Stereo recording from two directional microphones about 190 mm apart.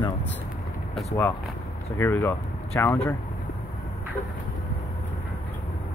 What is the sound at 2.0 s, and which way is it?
Speech, 15° left (ahead or behind).